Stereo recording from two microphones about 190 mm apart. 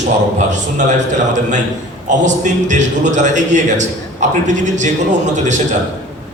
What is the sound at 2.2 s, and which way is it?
A man's voice, 40° right (ahead or behind).